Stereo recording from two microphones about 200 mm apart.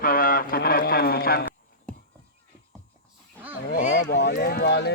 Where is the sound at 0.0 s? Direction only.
45° left (ahead or behind).